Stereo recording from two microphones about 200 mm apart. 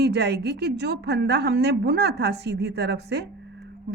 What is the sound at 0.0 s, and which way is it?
A woman's voice, 55° right (ahead or behind).